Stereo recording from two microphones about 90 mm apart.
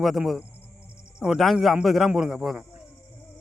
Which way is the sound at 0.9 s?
10° right (ahead or behind).